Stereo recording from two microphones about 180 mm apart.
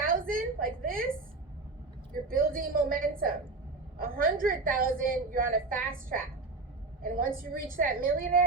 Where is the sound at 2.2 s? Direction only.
50° right (ahead or behind).